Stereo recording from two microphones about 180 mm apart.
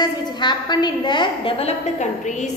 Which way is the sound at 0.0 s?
25° left (ahead or behind).